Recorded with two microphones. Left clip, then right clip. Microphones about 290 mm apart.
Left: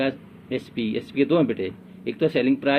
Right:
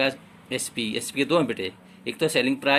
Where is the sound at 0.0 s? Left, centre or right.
Right.